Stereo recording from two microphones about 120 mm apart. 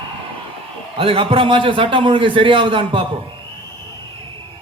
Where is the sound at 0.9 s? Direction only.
50° right (ahead or behind).